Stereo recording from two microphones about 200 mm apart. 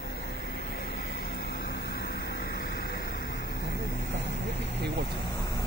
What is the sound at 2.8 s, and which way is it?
Vehicle, 45° left (ahead or behind).